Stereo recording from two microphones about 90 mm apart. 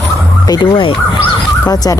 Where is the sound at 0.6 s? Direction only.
65° left (ahead or behind).